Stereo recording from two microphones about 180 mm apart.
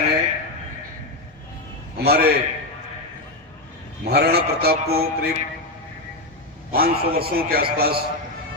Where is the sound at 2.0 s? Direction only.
60° right (ahead or behind).